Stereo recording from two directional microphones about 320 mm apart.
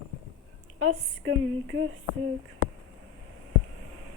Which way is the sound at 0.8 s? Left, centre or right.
Right.